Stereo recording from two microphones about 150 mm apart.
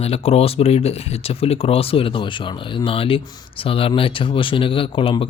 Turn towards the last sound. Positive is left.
turn(degrees=35)  # may be behind; listen again after turning